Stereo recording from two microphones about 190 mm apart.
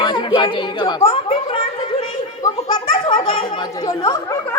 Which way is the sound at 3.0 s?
25° left (ahead or behind).